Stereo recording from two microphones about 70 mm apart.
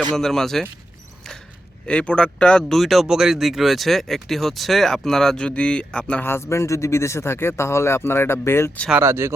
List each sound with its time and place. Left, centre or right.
0.2 s speech: centre
1.9 s speech: centre
6.2 s speech: left
9.0 s speech: right